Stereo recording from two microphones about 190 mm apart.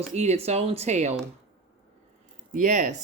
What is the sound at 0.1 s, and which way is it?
Speech, 35° right (ahead or behind).